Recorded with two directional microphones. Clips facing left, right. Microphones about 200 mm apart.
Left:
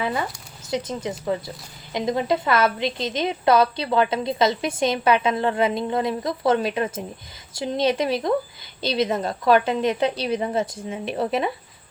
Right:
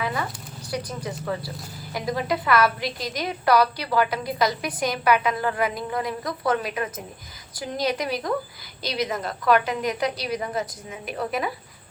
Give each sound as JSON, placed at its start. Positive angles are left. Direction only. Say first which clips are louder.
{"t": 0.0, "sound": "a woman's voice", "louder": "left 3 dB", "side_deg": 25}